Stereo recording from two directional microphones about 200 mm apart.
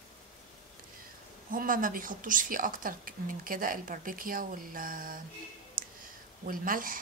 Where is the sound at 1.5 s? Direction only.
45° right (ahead or behind).